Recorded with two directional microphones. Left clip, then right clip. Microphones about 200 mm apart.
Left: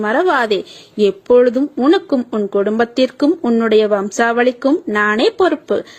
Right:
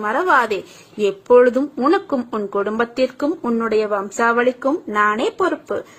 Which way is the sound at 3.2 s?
35° left (ahead or behind).